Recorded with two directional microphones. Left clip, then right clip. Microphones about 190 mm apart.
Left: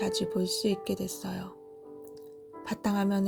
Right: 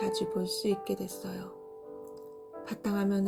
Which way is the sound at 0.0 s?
40° left (ahead or behind).